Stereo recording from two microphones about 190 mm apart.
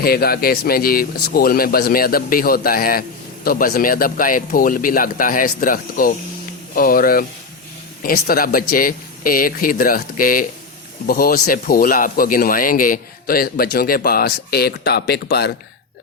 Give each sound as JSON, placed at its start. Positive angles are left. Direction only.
{"t": 0.0, "sound": "speech", "side_deg": 55}